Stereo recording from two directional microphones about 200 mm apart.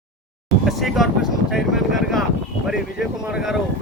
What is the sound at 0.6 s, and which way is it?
Vehicle, centre (ahead or behind).